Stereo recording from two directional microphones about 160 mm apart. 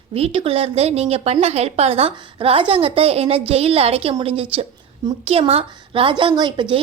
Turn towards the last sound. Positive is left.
turn(degrees=-30)  # may be behind; listen again after turning